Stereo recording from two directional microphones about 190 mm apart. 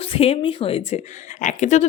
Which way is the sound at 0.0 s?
30° left (ahead or behind).